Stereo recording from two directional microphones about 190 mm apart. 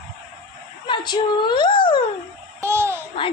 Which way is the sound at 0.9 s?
25° left (ahead or behind).